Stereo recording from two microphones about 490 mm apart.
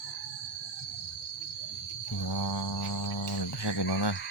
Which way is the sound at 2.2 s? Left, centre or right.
Left.